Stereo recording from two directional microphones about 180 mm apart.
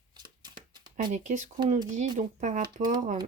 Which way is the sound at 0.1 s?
25° right (ahead or behind).